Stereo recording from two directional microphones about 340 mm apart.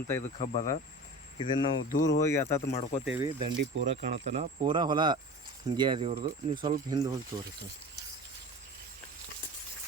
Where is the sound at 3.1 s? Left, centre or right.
Centre.